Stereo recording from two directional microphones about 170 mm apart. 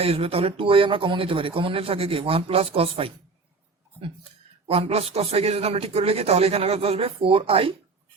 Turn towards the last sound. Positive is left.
turn(degrees=-35)  # may be behind; listen again after turning